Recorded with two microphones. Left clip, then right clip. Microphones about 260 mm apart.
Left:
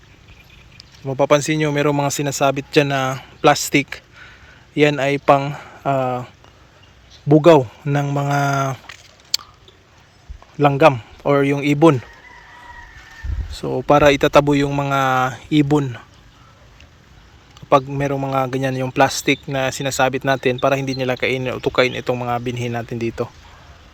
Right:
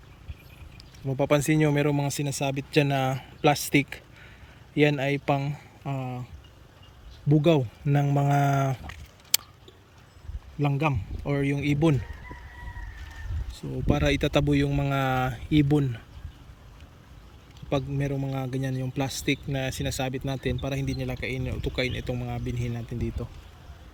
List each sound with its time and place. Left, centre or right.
0.8 s speech: centre
5.8 s speech: left
7.3 s speech: centre
10.6 s speech: left
10.9 s speech: centre
13.8 s speech: centre
17.7 s speech: centre